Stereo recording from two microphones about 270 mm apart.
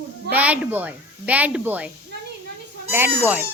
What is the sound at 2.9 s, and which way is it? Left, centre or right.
Speech, centre.